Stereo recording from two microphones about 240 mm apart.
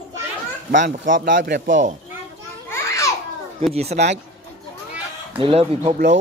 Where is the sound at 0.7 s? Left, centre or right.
Right.